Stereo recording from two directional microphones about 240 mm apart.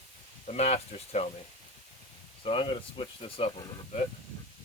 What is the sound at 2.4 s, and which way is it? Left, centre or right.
Speech, left.